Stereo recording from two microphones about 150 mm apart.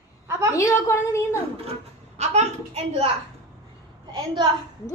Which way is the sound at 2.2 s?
50° right (ahead or behind).